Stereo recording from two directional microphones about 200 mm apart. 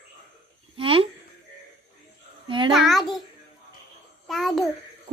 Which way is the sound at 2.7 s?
Centre (ahead or behind).